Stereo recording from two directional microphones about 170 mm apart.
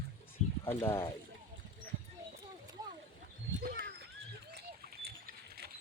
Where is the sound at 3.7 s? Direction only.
70° right (ahead or behind).